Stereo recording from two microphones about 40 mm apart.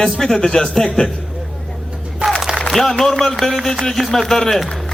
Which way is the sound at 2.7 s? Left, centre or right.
Centre.